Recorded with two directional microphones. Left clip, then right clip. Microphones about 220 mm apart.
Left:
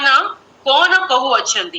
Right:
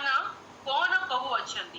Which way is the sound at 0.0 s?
45° left (ahead or behind).